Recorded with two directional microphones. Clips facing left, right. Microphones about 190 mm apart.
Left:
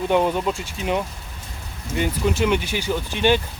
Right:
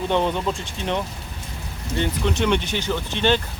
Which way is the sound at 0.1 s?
10° left (ahead or behind).